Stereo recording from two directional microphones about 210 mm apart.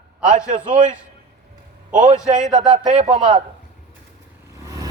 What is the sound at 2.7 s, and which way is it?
Speech, 30° right (ahead or behind).